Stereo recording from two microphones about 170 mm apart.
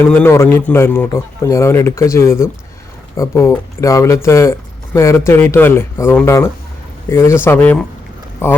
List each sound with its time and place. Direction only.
0.1 s a man's voice: 15° left (ahead or behind)